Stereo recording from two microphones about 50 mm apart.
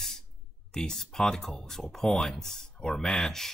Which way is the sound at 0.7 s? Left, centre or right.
Centre.